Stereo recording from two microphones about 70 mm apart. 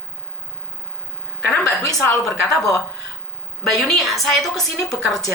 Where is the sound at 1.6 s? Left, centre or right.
Left.